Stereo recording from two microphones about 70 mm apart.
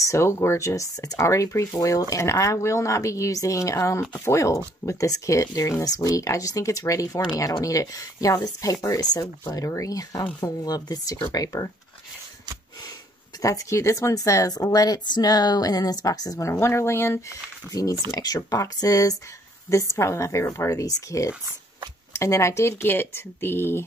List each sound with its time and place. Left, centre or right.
0.0 s a woman's voice: left
9.0 s a woman's voice: left
10.6 s speech: left
11.3 s a woman's voice: left
13.4 s a woman's voice: left
17.7 s a woman's voice: left
19.7 s speech: left